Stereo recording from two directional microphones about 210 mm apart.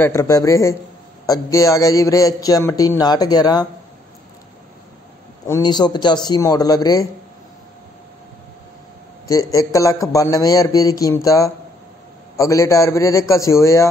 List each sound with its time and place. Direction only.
0.0 s a man's voice: 15° left (ahead or behind)
5.5 s a man's voice: 20° left (ahead or behind)
9.3 s a man's voice: 15° left (ahead or behind)